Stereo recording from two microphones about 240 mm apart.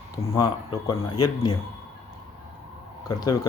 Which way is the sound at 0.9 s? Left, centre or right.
Centre.